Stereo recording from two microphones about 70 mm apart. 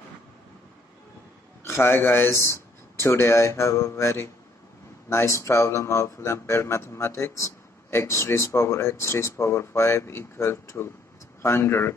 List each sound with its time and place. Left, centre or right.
1.6 s a man's voice: left